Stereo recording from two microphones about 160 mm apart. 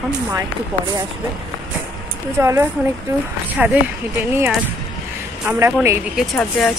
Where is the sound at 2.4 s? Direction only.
15° right (ahead or behind).